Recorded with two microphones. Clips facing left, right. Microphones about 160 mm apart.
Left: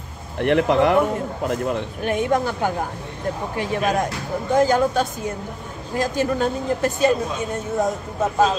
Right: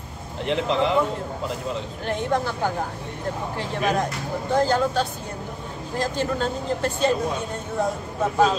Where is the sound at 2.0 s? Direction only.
15° left (ahead or behind).